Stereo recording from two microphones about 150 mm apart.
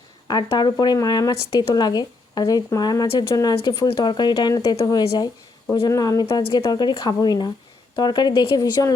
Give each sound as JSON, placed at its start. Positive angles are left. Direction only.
{"t": 0.3, "sound": "speech", "side_deg": 25}